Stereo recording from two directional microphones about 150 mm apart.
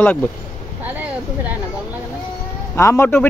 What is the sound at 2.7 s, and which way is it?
Speech, 20° left (ahead or behind).